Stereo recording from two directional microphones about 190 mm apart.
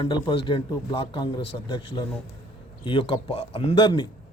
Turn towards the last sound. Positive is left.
turn(degrees=25)  # may be behind; listen again after turning